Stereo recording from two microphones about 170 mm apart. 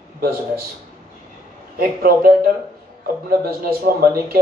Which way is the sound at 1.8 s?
60° right (ahead or behind).